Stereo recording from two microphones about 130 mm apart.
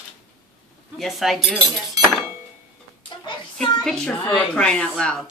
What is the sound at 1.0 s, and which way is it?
Speech, centre (ahead or behind).